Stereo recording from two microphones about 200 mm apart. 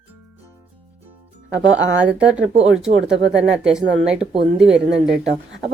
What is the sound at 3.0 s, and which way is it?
Speech, 60° right (ahead or behind).